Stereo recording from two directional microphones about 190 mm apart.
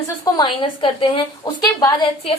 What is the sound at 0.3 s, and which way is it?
A woman's voice, 25° left (ahead or behind).